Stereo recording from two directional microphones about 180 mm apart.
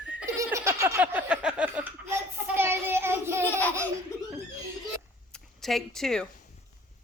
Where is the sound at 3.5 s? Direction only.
10° left (ahead or behind).